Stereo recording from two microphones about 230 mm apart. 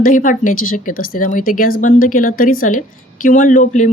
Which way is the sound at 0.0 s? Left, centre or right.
Left.